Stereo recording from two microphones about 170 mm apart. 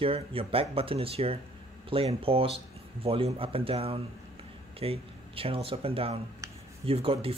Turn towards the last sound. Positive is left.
turn(degrees=-35)  # may be behind; listen again after turning